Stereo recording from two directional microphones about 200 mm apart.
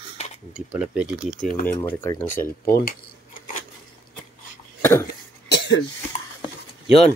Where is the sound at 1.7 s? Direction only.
10° left (ahead or behind).